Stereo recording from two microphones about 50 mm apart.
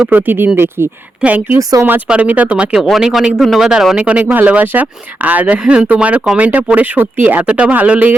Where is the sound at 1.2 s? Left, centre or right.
Right.